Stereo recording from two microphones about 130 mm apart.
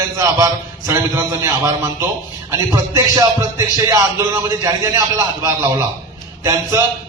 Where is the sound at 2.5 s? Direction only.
25° right (ahead or behind).